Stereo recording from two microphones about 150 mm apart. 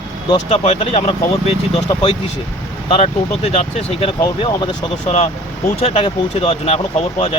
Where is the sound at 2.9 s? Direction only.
45° left (ahead or behind).